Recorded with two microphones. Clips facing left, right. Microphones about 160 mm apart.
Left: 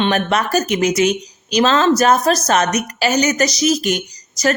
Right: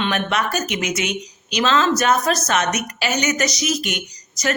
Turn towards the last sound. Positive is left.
turn(degrees=35)  # may be behind; listen again after turning